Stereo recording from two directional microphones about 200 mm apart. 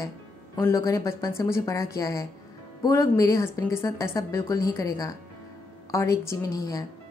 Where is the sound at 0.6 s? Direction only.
15° left (ahead or behind).